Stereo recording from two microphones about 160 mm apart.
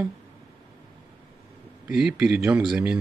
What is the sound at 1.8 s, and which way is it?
Speech, 5° right (ahead or behind).